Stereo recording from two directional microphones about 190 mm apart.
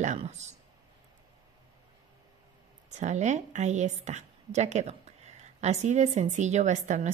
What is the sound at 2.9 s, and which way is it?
A woman's voice, 40° right (ahead or behind).